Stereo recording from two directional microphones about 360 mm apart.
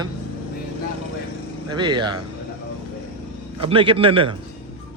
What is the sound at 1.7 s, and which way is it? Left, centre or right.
Speech, centre.